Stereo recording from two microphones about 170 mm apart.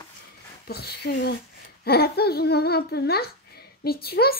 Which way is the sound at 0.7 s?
70° left (ahead or behind).